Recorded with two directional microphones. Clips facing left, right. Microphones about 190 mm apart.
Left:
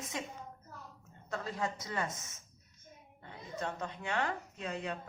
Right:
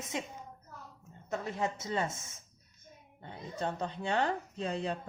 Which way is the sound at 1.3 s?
20° right (ahead or behind).